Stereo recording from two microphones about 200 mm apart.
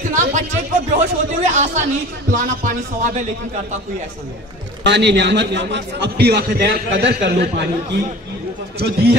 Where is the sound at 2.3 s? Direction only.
40° right (ahead or behind).